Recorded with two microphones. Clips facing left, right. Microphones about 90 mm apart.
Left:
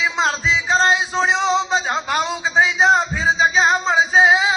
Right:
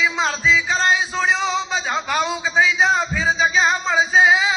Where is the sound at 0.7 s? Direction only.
30° left (ahead or behind).